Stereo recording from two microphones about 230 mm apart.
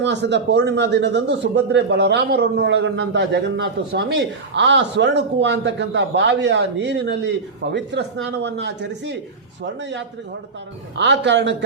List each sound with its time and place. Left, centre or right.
0.0 s a man's voice: right
10.9 s a man's voice: right